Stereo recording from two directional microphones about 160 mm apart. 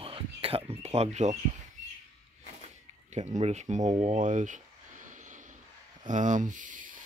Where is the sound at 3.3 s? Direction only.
45° right (ahead or behind).